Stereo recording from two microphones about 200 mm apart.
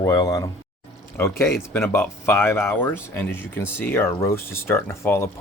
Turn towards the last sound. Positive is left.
turn(degrees=10)  # may be behind; listen again after turning